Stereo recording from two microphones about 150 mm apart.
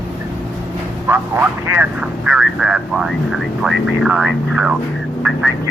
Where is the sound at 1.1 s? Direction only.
15° right (ahead or behind).